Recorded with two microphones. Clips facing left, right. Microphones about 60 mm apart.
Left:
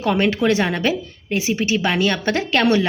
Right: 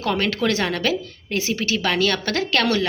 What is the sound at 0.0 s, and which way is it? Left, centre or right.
A woman's voice, centre.